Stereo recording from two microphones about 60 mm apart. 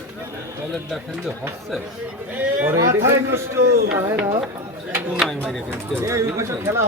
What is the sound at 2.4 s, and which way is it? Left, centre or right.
Speech, right.